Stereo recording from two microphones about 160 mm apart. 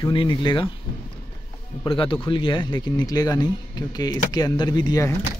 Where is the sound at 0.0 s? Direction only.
30° left (ahead or behind).